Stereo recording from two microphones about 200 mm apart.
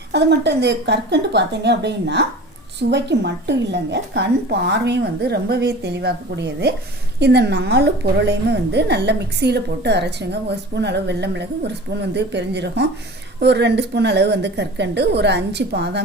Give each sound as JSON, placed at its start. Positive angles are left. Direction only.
{"t": 0.1, "sound": "a woman's voice", "side_deg": -55}